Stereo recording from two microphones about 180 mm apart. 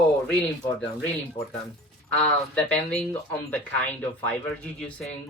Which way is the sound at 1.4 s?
35° left (ahead or behind).